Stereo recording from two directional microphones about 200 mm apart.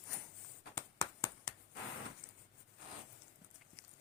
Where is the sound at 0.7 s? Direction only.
15° left (ahead or behind).